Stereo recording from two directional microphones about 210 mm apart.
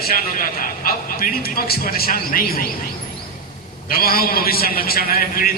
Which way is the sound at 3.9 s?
45° left (ahead or behind).